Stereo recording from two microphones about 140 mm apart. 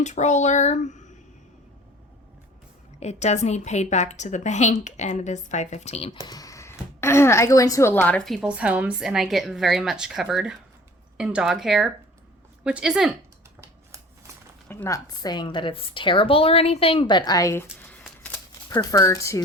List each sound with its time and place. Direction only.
0.0 s a woman's voice: 55° left (ahead or behind)
3.0 s a woman's voice: 55° left (ahead or behind)
6.2 s speech: 25° left (ahead or behind); by 13.1 s 5° right (ahead or behind)
14.7 s a woman's voice: 20° left (ahead or behind)
18.7 s speech: 25° left (ahead or behind)